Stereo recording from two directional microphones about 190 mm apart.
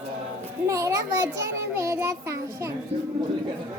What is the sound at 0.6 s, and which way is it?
A child's voice, 15° right (ahead or behind).